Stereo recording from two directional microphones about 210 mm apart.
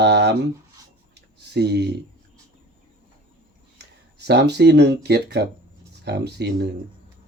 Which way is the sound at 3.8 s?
55° right (ahead or behind).